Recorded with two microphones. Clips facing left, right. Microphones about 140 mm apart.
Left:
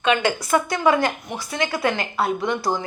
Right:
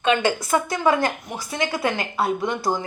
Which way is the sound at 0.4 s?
20° right (ahead or behind).